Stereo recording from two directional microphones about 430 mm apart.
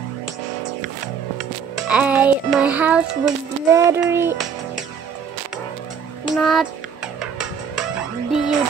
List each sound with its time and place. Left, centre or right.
1.9 s music: centre
6.2 s music: centre